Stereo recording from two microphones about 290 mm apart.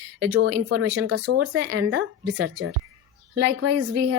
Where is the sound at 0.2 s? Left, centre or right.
Right.